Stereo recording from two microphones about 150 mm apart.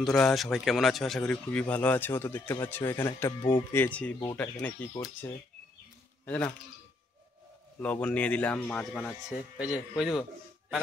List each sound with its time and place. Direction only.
0.0 s speech: 5° left (ahead or behind); by 5.3 s 20° left (ahead or behind)
6.2 s a man's voice: 10° left (ahead or behind)
7.8 s speech: 10° left (ahead or behind)